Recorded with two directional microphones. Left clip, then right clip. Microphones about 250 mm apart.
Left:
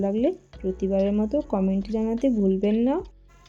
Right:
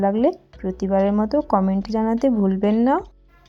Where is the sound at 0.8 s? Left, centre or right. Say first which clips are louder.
Right 5 dB; centre.